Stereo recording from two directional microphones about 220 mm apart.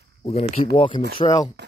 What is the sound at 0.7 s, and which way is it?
Speech, 20° left (ahead or behind).